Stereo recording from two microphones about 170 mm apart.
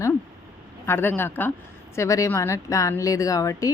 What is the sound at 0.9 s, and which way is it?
A woman's voice, 15° left (ahead or behind).